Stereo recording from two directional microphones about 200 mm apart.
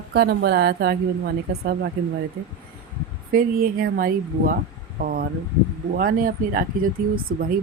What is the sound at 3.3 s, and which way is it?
A woman's voice, 45° right (ahead or behind).